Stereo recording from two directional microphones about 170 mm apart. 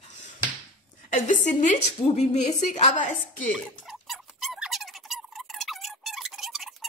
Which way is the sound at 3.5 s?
Centre (ahead or behind).